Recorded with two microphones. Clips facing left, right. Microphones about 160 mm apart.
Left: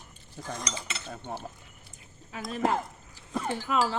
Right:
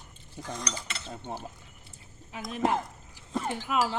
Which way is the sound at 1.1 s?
20° right (ahead or behind).